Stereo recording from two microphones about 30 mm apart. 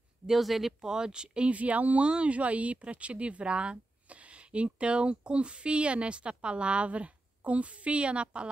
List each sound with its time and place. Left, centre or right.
0.3 s speech: centre
0.7 s speech: right
1.5 s speech: right
2.0 s speech: right
2.3 s speech: right